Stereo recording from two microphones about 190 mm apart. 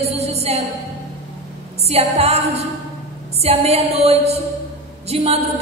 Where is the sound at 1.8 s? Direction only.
35° right (ahead or behind).